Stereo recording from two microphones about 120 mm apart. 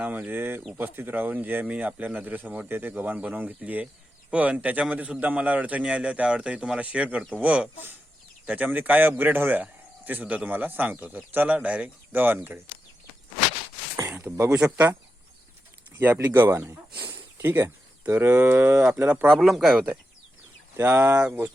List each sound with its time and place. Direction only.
0.0 s a man's voice: 15° right (ahead or behind)
14.3 s speech: 25° right (ahead or behind)
16.0 s speech: 15° right (ahead or behind)
19.3 s speech: centre (ahead or behind)
20.7 s speech: 20° right (ahead or behind)